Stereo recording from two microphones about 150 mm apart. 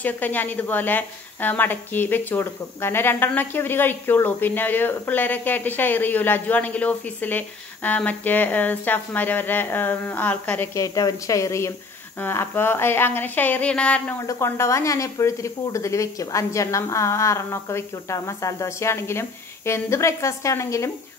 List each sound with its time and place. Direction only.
0.0 s a woman's voice: 10° left (ahead or behind)
14.2 s speech: 20° left (ahead or behind)